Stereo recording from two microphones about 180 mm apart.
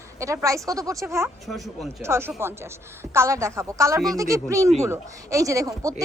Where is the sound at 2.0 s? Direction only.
15° right (ahead or behind).